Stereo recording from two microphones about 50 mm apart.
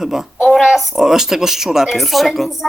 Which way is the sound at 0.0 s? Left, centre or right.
Centre.